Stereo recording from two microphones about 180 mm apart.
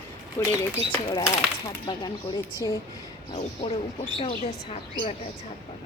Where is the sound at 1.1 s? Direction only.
15° left (ahead or behind).